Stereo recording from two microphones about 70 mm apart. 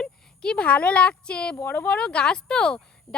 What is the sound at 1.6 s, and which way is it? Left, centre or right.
Speech, left.